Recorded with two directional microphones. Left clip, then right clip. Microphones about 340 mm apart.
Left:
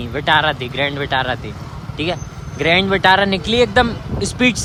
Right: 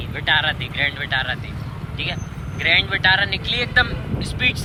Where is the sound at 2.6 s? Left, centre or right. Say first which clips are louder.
Left 3 dB; left.